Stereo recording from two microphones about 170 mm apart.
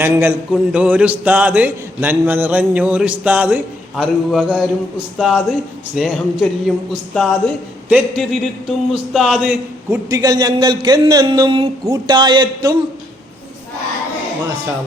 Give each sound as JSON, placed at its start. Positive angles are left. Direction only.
{"t": 0.0, "sound": "a man's voice", "side_deg": -10}
{"t": 10.1, "sound": "speech", "side_deg": -20}